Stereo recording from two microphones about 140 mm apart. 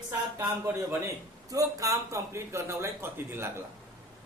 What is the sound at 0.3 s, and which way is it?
A man's voice, 20° right (ahead or behind).